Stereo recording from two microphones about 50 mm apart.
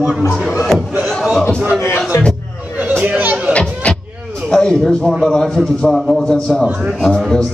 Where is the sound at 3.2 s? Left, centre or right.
Right.